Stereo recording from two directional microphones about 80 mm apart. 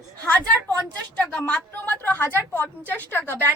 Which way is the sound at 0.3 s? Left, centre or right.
Left.